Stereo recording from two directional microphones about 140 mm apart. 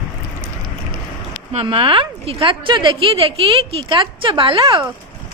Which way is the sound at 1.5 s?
40° right (ahead or behind).